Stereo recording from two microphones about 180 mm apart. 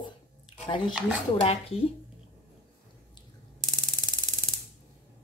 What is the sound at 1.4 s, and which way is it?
Speech, 35° left (ahead or behind).